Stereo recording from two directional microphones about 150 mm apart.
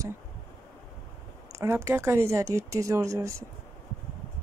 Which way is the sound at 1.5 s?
20° right (ahead or behind).